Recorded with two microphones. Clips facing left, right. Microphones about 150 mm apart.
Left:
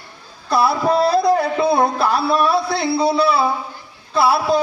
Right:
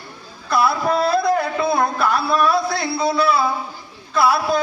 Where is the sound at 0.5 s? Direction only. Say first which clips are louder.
Left 2 dB; 30° left (ahead or behind).